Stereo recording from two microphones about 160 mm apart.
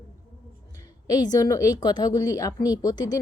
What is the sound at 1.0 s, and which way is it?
A woman's voice, 25° left (ahead or behind).